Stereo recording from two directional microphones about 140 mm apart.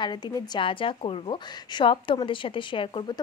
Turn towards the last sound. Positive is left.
turn(degrees=35)  # may be behind; listen again after turning